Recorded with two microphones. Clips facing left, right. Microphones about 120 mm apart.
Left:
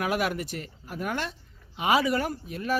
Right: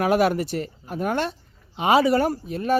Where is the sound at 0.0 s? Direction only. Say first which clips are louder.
Right 8 dB; 35° right (ahead or behind).